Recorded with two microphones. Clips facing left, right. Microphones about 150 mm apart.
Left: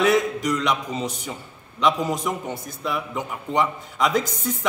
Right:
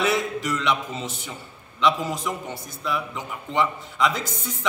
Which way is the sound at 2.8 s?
50° left (ahead or behind).